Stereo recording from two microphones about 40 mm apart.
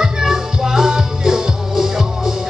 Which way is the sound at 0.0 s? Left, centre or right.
Centre.